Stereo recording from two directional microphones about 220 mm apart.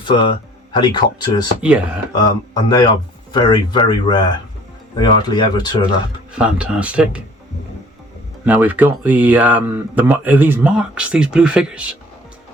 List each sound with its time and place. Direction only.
0.0 s speech: 20° left (ahead or behind)
6.3 s speech: 5° right (ahead or behind)
8.4 s speech: 5° right (ahead or behind)